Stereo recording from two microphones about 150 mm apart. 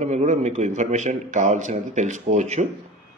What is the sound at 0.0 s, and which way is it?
A man's voice, 50° right (ahead or behind).